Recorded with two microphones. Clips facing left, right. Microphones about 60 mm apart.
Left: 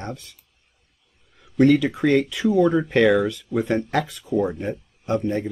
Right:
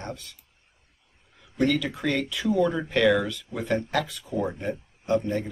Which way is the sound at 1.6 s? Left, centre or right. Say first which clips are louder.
Left 8 dB; left.